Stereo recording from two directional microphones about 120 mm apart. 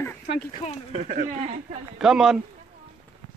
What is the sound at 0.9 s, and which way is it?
Speech, 65° right (ahead or behind).